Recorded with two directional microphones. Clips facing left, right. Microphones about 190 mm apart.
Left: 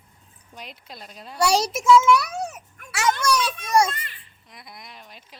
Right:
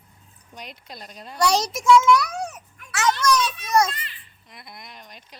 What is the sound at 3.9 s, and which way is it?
Speech, 50° left (ahead or behind).